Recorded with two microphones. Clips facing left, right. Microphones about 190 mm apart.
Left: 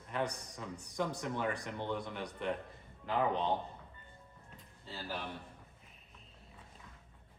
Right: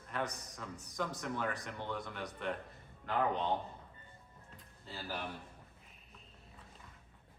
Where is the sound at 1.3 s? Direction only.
15° left (ahead or behind).